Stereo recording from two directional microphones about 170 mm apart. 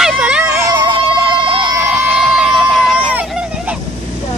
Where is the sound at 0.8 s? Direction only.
25° right (ahead or behind).